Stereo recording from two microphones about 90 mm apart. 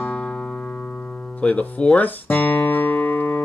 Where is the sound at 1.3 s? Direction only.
15° left (ahead or behind).